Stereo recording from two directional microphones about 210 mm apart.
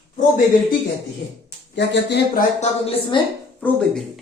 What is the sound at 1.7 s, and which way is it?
Speech, 55° left (ahead or behind).